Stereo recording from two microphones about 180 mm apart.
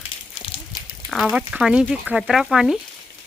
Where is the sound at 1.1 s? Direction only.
Centre (ahead or behind).